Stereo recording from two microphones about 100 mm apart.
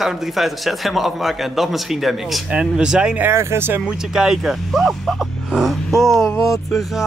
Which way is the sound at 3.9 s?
5° right (ahead or behind).